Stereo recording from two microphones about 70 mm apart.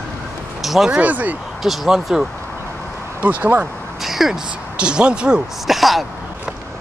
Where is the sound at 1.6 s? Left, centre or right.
Centre.